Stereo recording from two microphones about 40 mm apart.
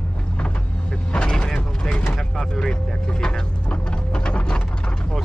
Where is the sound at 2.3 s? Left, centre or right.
Centre.